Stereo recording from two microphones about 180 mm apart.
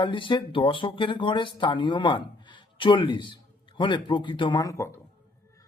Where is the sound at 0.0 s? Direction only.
25° left (ahead or behind).